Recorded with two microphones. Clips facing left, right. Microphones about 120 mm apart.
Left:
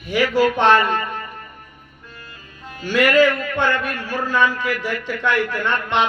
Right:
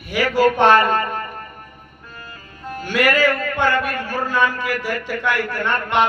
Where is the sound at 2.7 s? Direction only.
45° right (ahead or behind).